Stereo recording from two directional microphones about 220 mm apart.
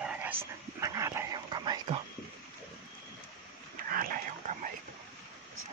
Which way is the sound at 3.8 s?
40° right (ahead or behind).